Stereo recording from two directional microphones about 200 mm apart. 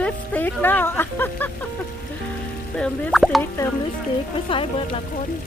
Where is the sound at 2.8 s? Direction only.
5° left (ahead or behind).